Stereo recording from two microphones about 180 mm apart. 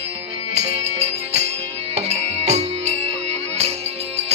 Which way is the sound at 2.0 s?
35° right (ahead or behind).